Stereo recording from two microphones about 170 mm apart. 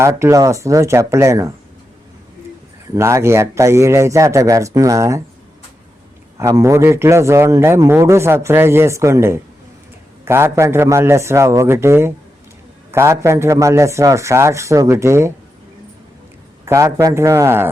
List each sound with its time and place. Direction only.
0.0 s a man's voice: 15° right (ahead or behind)
2.9 s a man's voice: 15° right (ahead or behind)
6.3 s a man's voice: 20° right (ahead or behind)
16.6 s a man's voice: 20° right (ahead or behind)